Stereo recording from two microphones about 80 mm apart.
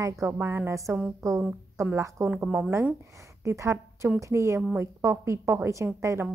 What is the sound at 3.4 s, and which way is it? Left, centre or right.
A woman's voice, right.